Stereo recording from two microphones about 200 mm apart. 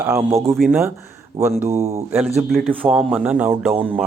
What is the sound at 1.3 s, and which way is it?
A man's voice, 15° right (ahead or behind).